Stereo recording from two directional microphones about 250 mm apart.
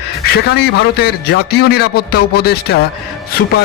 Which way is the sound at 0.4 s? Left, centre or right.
Left.